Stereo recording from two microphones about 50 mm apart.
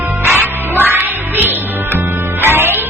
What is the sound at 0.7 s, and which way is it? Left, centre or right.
Music, right.